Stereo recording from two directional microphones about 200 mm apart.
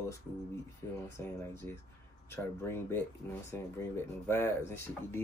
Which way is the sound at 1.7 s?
30° right (ahead or behind).